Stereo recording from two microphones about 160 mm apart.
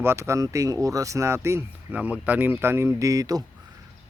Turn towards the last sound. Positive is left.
turn(degrees=-20)  # may be behind; listen again after turning